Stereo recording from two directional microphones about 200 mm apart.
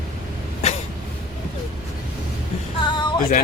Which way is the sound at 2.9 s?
25° left (ahead or behind).